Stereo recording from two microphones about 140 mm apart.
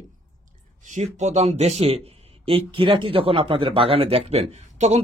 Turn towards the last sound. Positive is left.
turn(degrees=-50)  # may be behind; listen again after turning